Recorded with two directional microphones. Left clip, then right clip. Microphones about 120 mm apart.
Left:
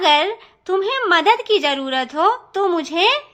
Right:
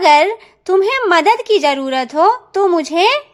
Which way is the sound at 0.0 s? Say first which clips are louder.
Right 5 dB; 35° right (ahead or behind).